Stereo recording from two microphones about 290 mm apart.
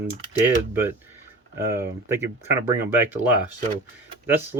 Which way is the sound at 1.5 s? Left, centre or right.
Centre.